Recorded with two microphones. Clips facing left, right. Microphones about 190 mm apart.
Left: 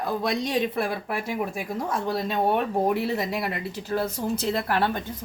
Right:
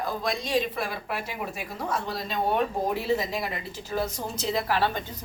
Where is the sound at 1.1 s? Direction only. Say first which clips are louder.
Left 3 dB; 50° left (ahead or behind).